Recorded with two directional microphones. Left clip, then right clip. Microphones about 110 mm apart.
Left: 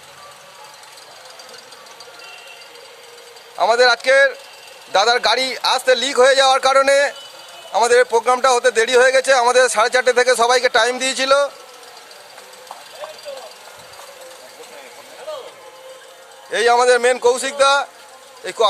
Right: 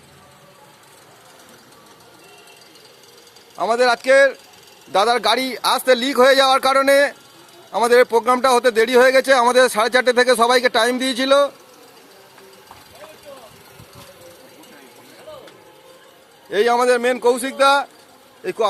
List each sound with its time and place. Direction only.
3.5 s a man's voice: centre (ahead or behind)
16.5 s speech: 5° right (ahead or behind)